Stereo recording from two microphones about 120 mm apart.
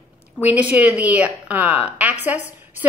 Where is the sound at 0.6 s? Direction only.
10° right (ahead or behind).